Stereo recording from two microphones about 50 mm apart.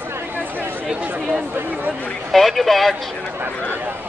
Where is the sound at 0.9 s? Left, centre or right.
Right.